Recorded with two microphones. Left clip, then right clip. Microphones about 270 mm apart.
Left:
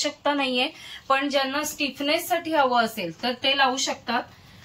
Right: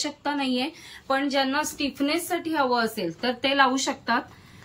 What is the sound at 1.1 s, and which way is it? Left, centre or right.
A woman's voice, centre.